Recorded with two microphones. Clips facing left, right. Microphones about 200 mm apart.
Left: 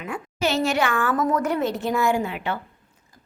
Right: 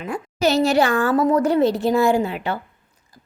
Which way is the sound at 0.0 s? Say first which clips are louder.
Right 5 dB; 40° right (ahead or behind).